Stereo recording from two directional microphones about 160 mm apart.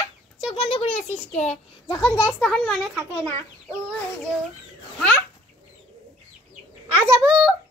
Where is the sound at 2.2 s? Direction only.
Centre (ahead or behind).